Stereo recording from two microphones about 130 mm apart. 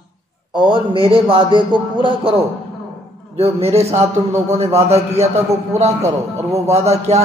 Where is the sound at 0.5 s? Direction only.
40° right (ahead or behind).